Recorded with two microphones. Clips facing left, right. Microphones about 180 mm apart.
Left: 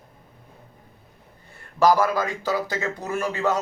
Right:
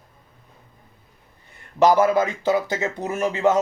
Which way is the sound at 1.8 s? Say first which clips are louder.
Right 3 dB; 20° right (ahead or behind).